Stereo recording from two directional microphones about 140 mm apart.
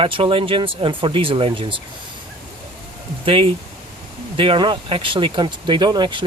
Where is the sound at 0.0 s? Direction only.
40° right (ahead or behind).